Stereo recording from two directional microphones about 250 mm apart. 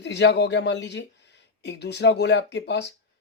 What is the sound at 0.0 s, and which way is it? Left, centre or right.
Speech, left.